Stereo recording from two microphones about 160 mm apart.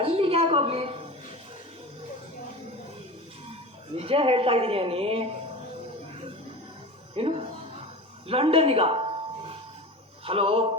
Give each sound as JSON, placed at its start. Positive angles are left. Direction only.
{"t": 0.0, "sound": "a sound", "side_deg": -35}
{"t": 3.9, "sound": "a woman's voice", "side_deg": -35}
{"t": 7.2, "sound": "a woman's voice", "side_deg": -35}
{"t": 10.2, "sound": "a woman's voice", "side_deg": -35}